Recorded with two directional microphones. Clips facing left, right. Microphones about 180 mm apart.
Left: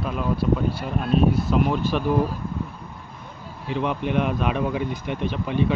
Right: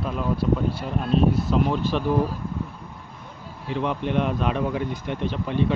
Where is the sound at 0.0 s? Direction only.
10° left (ahead or behind).